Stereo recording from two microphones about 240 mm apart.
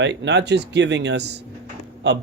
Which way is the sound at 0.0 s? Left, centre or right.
Right.